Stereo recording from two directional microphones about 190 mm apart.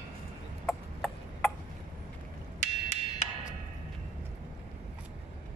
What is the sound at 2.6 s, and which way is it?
Wood block, 35° left (ahead or behind).